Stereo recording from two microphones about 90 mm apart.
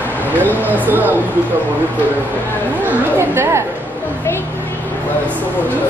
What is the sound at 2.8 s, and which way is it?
Speech, 30° right (ahead or behind).